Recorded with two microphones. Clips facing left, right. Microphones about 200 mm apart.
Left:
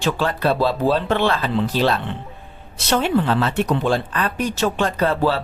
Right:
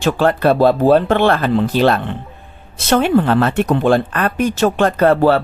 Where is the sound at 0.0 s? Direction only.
55° right (ahead or behind).